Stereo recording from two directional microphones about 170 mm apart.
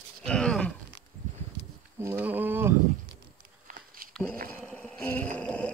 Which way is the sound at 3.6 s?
55° right (ahead or behind).